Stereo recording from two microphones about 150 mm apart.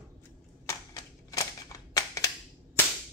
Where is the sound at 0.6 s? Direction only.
20° left (ahead or behind).